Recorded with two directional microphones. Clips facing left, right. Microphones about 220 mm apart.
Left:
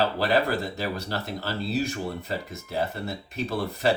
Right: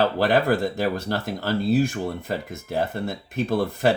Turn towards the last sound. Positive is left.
turn(degrees=-50)  # may be behind; listen again after turning